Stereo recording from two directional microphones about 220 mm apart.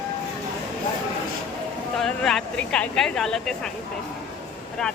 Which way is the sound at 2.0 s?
Centre (ahead or behind).